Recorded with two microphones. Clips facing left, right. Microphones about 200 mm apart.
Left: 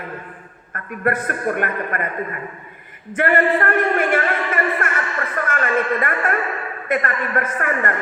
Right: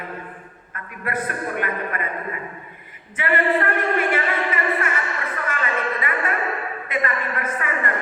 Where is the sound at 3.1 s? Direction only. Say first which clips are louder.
Left 4 dB; 45° left (ahead or behind).